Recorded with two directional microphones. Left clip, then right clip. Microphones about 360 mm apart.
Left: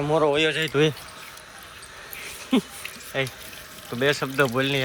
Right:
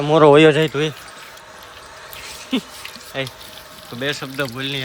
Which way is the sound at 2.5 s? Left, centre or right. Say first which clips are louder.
Even; centre.